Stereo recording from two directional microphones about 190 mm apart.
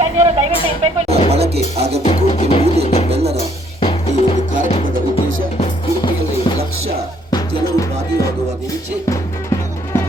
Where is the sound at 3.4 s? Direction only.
30° left (ahead or behind).